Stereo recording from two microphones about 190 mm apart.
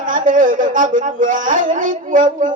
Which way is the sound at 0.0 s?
45° right (ahead or behind).